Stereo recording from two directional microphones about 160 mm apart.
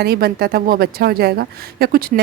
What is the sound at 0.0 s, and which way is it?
Speech, 75° right (ahead or behind).